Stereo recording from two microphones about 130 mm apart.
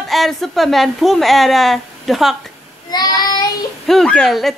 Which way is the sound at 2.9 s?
30° left (ahead or behind).